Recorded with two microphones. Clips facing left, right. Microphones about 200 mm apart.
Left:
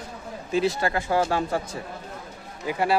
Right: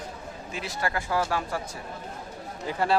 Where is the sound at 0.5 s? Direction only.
25° left (ahead or behind).